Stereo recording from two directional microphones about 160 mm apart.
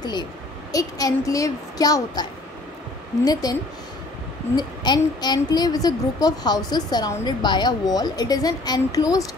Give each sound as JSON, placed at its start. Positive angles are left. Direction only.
{"t": 0.0, "sound": "a woman's voice", "side_deg": 25}
{"t": 3.3, "sound": "a woman's voice", "side_deg": 25}
{"t": 4.6, "sound": "a woman's voice", "side_deg": 25}